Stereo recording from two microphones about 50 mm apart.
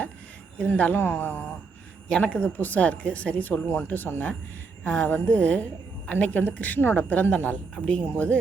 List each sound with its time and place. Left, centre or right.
0.7 s speech: left
2.0 s a woman's voice: centre
2.6 s speech: left
4.8 s a woman's voice: left